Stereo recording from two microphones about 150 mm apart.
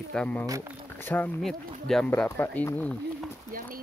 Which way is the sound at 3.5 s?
70° right (ahead or behind).